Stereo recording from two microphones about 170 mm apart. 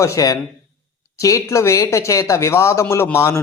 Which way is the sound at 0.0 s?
20° left (ahead or behind).